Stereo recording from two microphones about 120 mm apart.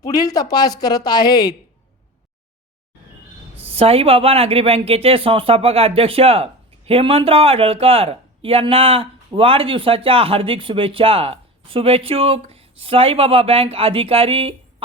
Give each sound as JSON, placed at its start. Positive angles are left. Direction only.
{"t": 0.0, "sound": "a woman's voice", "side_deg": 30}
{"t": 3.6, "sound": "speech", "side_deg": -55}